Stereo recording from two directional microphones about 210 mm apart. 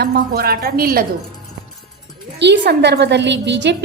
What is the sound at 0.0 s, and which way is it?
A woman's voice, 50° right (ahead or behind).